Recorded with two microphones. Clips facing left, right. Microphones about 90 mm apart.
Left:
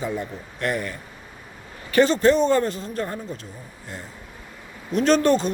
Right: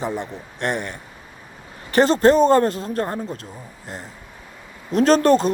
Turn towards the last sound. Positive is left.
turn(degrees=-40)  # may be behind; listen again after turning